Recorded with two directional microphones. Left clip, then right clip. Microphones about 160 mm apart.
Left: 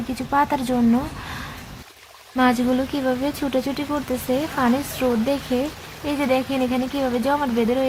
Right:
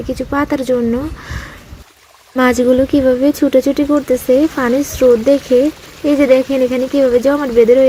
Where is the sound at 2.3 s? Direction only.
30° right (ahead or behind).